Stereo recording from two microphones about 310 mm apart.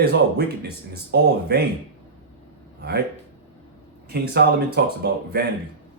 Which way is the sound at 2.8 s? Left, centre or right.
Right.